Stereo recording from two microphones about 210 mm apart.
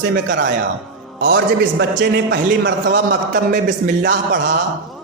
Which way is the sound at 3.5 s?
35° right (ahead or behind).